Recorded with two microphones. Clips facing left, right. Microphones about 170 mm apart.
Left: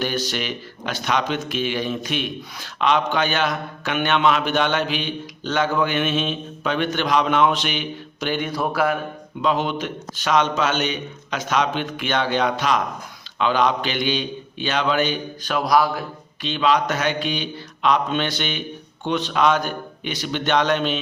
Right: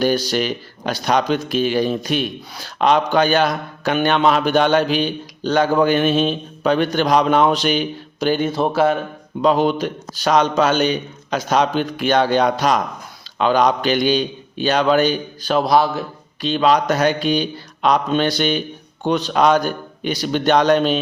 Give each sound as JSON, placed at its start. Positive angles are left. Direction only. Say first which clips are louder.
{"t": 0.0, "sound": "speech", "louder": "right 7 dB", "side_deg": -35}
{"t": 9.4, "sound": "speech", "louder": "right 6 dB", "side_deg": -40}
{"t": 16.4, "sound": "speech", "louder": "right 4 dB", "side_deg": -40}